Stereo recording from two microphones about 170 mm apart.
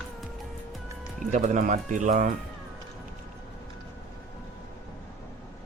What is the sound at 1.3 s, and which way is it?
Speech, 50° right (ahead or behind).